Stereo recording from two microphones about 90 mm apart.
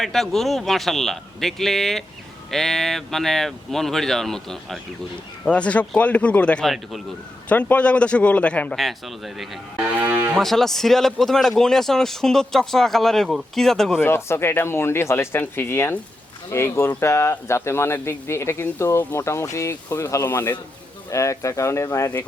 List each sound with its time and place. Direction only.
0.0 s a man's voice: centre (ahead or behind)
8.7 s a man's voice: centre (ahead or behind)
9.7 s speech: 20° right (ahead or behind)
10.4 s a man's voice: 5° left (ahead or behind)
14.0 s speech: 25° left (ahead or behind)